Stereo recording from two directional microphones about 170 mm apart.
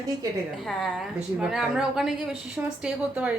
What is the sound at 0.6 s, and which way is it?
A woman's voice, centre (ahead or behind).